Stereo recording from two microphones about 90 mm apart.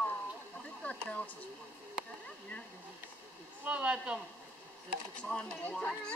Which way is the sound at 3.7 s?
15° right (ahead or behind).